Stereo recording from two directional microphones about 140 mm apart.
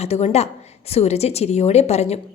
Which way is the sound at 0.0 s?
50° left (ahead or behind).